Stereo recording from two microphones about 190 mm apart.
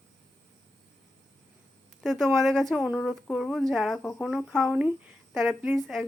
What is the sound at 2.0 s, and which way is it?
Speech, centre (ahead or behind).